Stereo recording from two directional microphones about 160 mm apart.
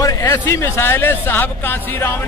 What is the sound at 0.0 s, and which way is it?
Speech, 20° left (ahead or behind).